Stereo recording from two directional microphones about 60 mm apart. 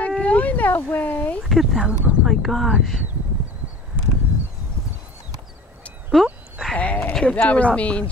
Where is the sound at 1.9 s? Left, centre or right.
Right.